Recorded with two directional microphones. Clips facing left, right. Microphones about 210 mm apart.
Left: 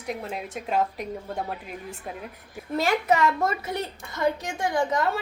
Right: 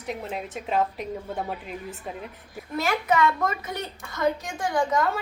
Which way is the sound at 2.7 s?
35° left (ahead or behind).